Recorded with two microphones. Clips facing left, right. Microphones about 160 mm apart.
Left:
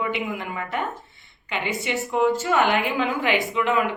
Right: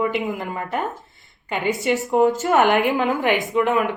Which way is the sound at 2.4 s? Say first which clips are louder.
Right 4 dB; 55° right (ahead or behind).